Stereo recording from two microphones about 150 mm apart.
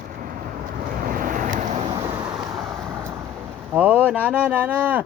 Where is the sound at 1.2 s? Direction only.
60° right (ahead or behind).